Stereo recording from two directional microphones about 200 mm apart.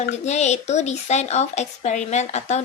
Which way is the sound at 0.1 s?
35° left (ahead or behind).